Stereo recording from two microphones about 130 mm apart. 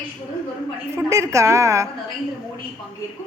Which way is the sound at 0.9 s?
25° right (ahead or behind).